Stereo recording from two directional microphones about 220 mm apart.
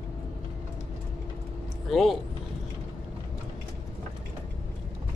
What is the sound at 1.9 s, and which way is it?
Speech, centre (ahead or behind).